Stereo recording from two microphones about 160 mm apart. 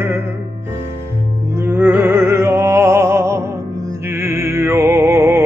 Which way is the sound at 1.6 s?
15° right (ahead or behind).